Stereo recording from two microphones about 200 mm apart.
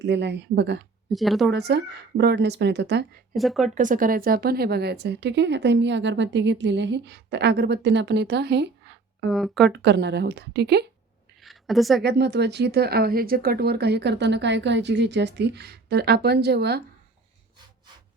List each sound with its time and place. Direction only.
0.0 s a woman's voice: 60° right (ahead or behind)
1.1 s speech: centre (ahead or behind)
1.5 s a woman's voice: 55° right (ahead or behind)
3.3 s speech: centre (ahead or behind)
3.8 s a woman's voice: 40° right (ahead or behind); by 9.0 s 55° right (ahead or behind)
9.3 s speech: centre (ahead or behind)
9.7 s a woman's voice: 60° right (ahead or behind)
11.4 s a sound: centre (ahead or behind)
12.0 s a woman's voice: 60° right (ahead or behind)